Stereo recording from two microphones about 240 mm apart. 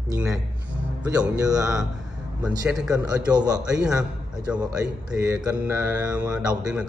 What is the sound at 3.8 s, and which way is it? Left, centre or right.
Speech, centre.